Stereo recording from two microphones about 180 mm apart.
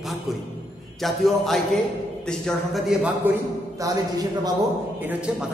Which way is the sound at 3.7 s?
20° right (ahead or behind).